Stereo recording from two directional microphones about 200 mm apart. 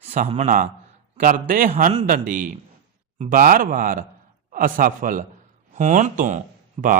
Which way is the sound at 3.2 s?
40° right (ahead or behind).